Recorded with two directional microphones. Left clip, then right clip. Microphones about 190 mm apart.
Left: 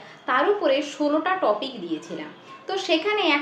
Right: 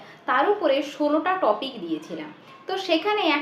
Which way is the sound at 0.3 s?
Centre (ahead or behind).